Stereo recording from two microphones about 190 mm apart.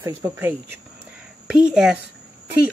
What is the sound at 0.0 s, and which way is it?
Speech, 10° right (ahead or behind).